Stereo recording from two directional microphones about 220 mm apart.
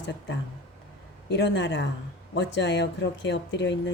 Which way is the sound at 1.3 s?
50° left (ahead or behind).